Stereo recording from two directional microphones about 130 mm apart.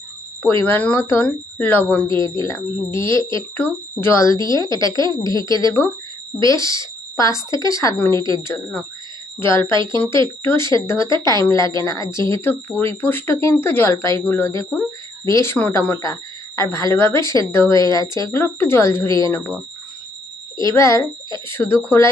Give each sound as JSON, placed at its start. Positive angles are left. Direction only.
{"t": 0.6, "sound": "speech", "side_deg": 10}
{"t": 2.2, "sound": "speech", "side_deg": 25}
{"t": 9.4, "sound": "speech", "side_deg": 20}
{"t": 12.3, "sound": "speech", "side_deg": 15}
{"t": 16.6, "sound": "speech", "side_deg": 25}
{"t": 20.6, "sound": "speech", "side_deg": 25}